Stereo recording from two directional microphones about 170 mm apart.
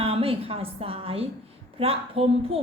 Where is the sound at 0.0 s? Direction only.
35° right (ahead or behind).